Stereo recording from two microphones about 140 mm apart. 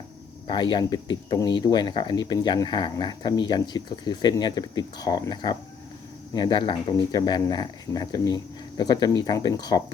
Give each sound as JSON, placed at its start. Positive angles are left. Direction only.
{"t": 0.4, "sound": "speech", "side_deg": 30}